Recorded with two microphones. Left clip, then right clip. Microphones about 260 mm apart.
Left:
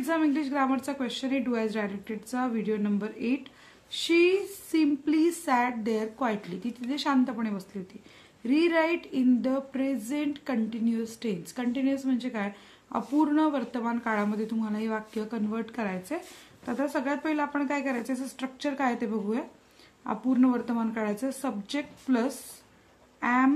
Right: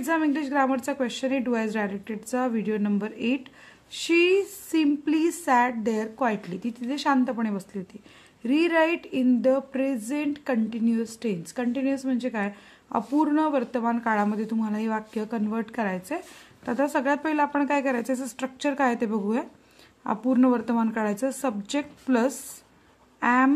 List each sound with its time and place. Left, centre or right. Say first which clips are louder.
0.0 s speech: right 2 dB; right